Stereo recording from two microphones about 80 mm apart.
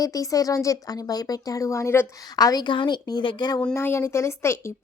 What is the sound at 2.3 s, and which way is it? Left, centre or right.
A woman's voice, left.